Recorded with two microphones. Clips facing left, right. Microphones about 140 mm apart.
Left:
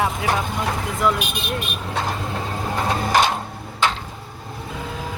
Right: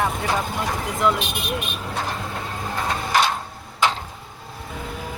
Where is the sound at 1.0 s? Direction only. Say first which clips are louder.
Even; centre (ahead or behind).